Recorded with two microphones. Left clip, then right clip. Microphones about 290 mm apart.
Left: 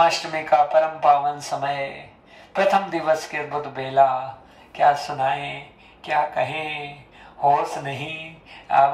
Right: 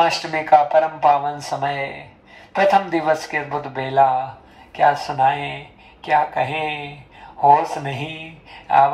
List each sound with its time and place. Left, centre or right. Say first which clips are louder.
0.0 s speech: right 1 dB; centre